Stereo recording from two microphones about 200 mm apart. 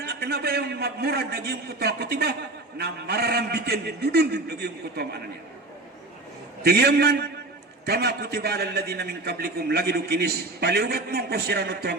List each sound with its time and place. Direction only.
0.0 s a man's voice: 55° right (ahead or behind)
6.6 s a man's voice: 55° right (ahead or behind)